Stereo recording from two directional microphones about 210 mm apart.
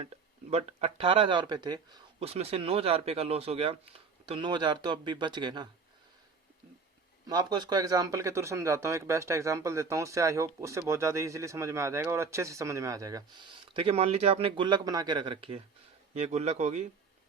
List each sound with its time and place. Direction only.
0.5 s speech: 30° right (ahead or behind)
7.3 s speech: 20° right (ahead or behind)
13.7 s a man's voice: 25° right (ahead or behind)